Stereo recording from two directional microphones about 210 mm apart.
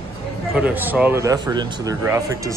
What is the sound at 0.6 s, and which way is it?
Speech, 10° right (ahead or behind).